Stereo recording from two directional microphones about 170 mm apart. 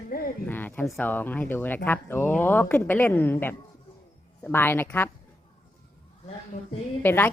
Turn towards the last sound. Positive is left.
turn(degrees=10)  # may be behind; listen again after turning